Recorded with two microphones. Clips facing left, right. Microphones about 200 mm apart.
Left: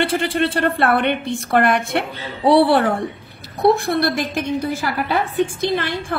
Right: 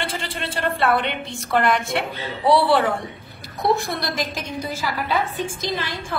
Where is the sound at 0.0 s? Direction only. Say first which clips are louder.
Left 10 dB; 60° left (ahead or behind).